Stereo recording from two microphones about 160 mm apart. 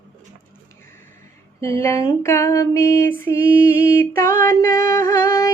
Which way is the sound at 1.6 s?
20° left (ahead or behind).